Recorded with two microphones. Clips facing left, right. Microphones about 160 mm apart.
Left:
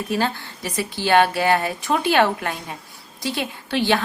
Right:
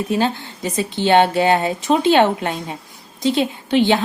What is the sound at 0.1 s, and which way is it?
A woman's voice, 20° right (ahead or behind).